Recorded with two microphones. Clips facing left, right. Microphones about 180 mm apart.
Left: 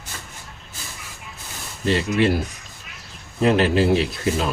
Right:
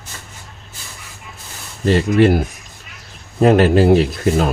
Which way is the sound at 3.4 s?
45° right (ahead or behind).